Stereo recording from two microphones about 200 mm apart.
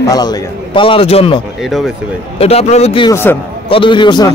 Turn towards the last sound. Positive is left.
turn(degrees=20)  # may be behind; listen again after turning